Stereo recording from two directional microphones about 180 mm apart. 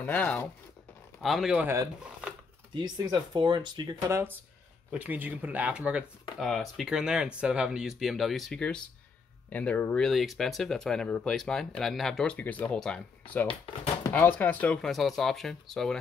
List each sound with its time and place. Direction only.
0.0 s speech: 10° left (ahead or behind)
1.2 s speech: centre (ahead or behind)
2.7 s speech: 25° right (ahead or behind)
4.9 s speech: 10° right (ahead or behind)